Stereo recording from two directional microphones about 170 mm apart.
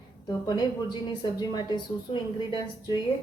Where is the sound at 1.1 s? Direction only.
25° left (ahead or behind).